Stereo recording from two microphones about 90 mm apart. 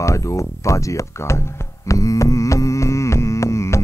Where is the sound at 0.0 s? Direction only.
35° left (ahead or behind).